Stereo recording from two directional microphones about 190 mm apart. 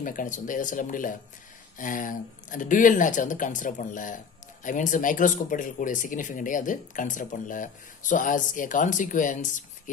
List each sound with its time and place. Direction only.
0.0 s speech: 45° left (ahead or behind)